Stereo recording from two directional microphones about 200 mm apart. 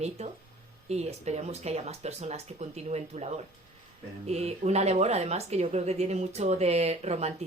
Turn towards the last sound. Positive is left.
turn(degrees=-30)  # may be behind; listen again after turning